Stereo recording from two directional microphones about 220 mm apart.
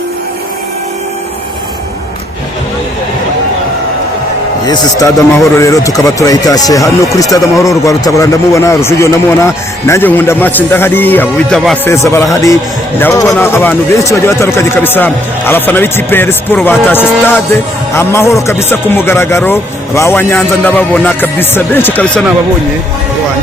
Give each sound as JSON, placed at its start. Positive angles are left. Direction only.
{"t": 4.6, "sound": "speech", "side_deg": 20}
{"t": 12.0, "sound": "speech", "side_deg": 15}